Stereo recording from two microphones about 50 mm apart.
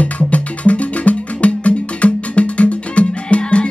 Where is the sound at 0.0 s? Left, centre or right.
Left.